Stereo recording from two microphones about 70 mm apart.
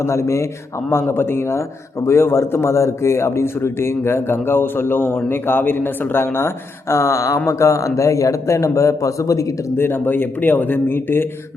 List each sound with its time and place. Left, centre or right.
0.0 s a man's voice: left
9.7 s speech: left